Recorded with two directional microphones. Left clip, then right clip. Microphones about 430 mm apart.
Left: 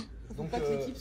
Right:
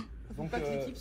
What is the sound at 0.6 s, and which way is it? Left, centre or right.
Speech, centre.